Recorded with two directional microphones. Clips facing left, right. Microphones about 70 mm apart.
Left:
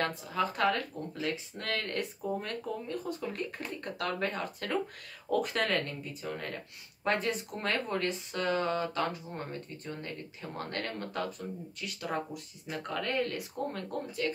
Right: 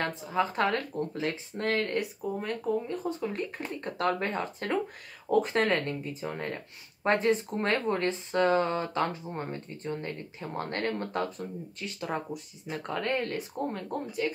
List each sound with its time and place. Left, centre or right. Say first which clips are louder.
0.0 s speech: right 2 dB; right
2.2 s speech: right 4 dB; centre; by 13.4 s right
13.7 s speech: right 3 dB; right